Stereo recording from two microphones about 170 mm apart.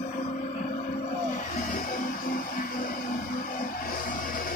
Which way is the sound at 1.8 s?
55° left (ahead or behind).